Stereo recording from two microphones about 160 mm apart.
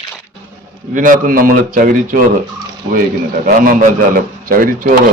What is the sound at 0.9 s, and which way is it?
Speech, 55° right (ahead or behind).